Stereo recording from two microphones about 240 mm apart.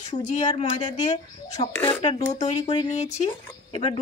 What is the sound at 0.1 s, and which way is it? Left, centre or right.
Speech, left.